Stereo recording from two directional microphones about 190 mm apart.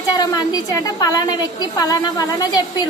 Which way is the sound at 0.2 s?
20° left (ahead or behind).